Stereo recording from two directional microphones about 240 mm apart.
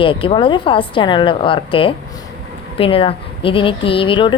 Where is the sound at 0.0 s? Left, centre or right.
Left.